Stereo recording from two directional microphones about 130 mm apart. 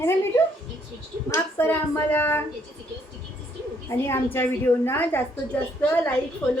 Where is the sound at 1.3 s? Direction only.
20° left (ahead or behind).